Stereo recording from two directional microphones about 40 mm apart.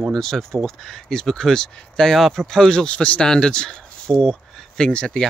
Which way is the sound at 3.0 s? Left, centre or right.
Left.